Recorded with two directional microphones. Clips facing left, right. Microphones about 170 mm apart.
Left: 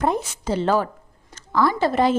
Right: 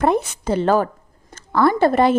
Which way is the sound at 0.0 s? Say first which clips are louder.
Right 4 dB; 60° right (ahead or behind).